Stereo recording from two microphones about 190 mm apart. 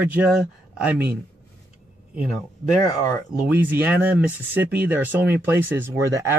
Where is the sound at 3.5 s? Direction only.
10° right (ahead or behind).